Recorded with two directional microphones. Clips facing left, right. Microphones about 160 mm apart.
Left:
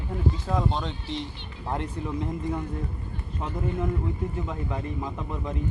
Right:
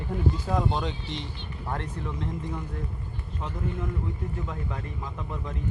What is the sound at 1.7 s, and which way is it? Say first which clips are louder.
Speech: left 4 dB; 15° left (ahead or behind).